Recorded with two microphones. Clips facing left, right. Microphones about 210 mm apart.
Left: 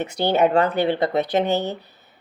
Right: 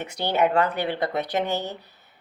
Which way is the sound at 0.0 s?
25° left (ahead or behind).